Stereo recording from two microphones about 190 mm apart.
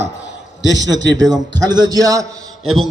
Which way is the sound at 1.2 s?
20° right (ahead or behind).